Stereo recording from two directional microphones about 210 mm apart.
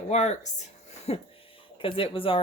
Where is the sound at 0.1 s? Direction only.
35° left (ahead or behind).